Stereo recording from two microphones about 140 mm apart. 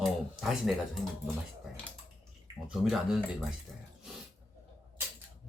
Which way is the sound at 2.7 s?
Centre (ahead or behind).